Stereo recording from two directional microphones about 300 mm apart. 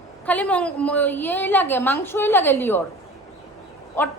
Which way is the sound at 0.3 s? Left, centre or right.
Centre.